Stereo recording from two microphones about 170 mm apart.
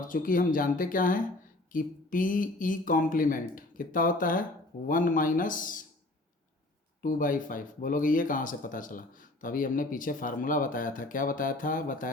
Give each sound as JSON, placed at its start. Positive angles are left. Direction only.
{"t": 0.1, "sound": "speech", "side_deg": 55}
{"t": 7.0, "sound": "speech", "side_deg": 50}